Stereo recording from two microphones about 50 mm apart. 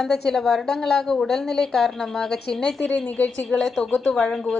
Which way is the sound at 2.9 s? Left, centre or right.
Left.